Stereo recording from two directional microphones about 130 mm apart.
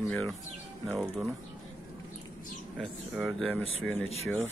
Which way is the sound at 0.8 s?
5° right (ahead or behind).